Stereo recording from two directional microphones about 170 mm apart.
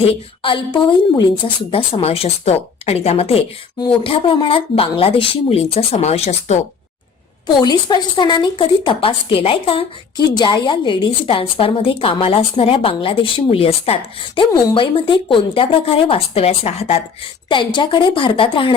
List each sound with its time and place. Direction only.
0.0 s a woman's voice: 35° left (ahead or behind)
7.4 s a woman's voice: 25° left (ahead or behind)